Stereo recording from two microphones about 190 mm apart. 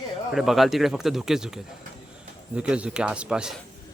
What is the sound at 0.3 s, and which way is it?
Speech, centre (ahead or behind).